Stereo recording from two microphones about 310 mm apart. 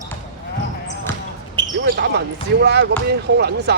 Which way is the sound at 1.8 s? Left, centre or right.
Right.